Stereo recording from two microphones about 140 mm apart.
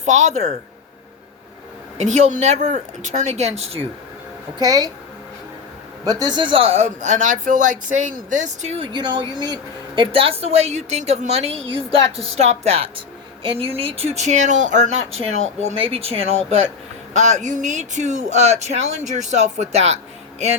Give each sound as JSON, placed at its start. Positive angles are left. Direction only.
{"t": 0.0, "sound": "speech", "side_deg": -55}
{"t": 2.0, "sound": "a woman's voice", "side_deg": -55}
{"t": 4.5, "sound": "speech", "side_deg": -25}
{"t": 6.1, "sound": "speech", "side_deg": -30}
{"t": 8.8, "sound": "a woman's voice", "side_deg": -35}